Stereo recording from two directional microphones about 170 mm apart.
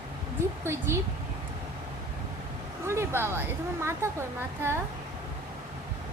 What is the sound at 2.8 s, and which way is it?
A child's voice, 15° right (ahead or behind).